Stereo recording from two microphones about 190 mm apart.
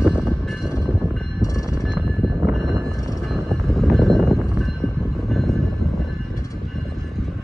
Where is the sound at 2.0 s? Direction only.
5° right (ahead or behind).